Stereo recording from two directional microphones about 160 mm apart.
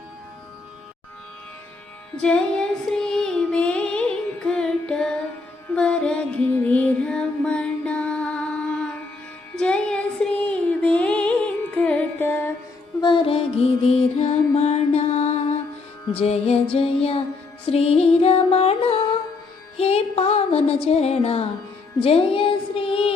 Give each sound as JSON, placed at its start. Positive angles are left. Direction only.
{"t": 2.2, "sound": "female singing", "side_deg": 5}
{"t": 4.4, "sound": "carnatic music", "side_deg": 5}
{"t": 5.7, "sound": "music", "side_deg": 5}
{"t": 13.0, "sound": "music", "side_deg": 30}
{"t": 22.0, "sound": "child singing", "side_deg": 35}